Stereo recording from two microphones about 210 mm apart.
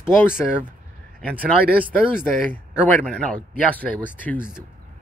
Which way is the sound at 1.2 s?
5° left (ahead or behind).